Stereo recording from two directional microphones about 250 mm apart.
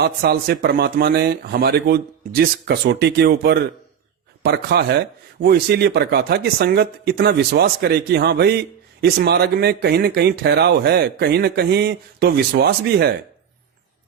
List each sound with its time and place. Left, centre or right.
0.0 s speech: right